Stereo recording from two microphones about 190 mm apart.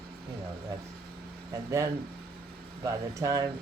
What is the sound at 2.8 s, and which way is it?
Speech, 20° right (ahead or behind).